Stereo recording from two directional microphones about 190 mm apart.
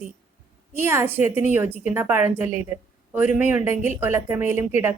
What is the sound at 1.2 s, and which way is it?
Speech, 40° left (ahead or behind).